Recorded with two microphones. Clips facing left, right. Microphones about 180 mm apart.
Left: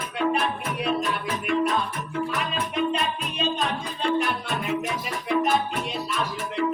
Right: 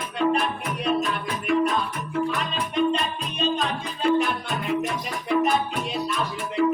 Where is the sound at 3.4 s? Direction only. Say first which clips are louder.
Right 2 dB; centre (ahead or behind).